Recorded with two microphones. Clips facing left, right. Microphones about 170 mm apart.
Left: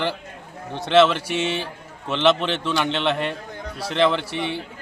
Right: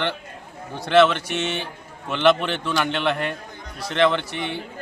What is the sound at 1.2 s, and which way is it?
Speech, 30° left (ahead or behind).